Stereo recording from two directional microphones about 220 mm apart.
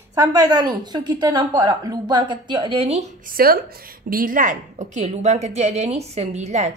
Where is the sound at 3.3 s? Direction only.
40° right (ahead or behind).